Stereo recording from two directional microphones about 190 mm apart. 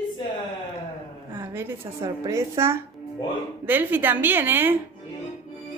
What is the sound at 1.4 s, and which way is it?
A woman's voice, 10° right (ahead or behind).